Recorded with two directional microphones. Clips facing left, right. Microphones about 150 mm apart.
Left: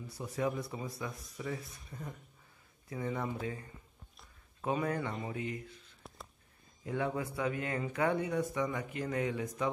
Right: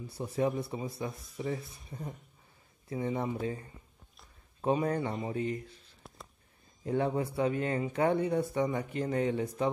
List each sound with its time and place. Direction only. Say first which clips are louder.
0.2 s speech: right 4 dB; 25° right (ahead or behind)
6.0 s a sound: even; centre (ahead or behind)
6.8 s speech: right 5 dB; 30° right (ahead or behind)